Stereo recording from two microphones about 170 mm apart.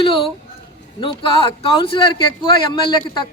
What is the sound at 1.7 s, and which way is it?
A man's voice, 30° left (ahead or behind).